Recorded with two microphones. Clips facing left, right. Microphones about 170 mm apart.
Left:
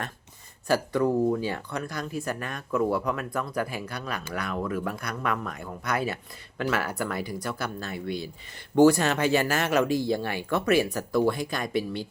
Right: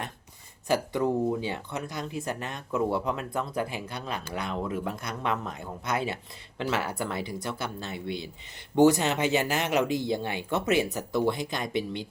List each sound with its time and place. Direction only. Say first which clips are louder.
0.7 s speech: left 2 dB; 20° right (ahead or behind)